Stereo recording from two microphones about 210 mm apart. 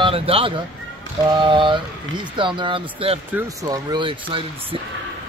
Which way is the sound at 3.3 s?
15° right (ahead or behind).